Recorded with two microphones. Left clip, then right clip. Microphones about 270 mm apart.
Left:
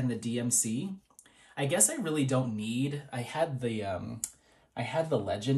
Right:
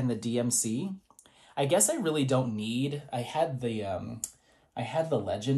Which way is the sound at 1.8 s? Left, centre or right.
Centre.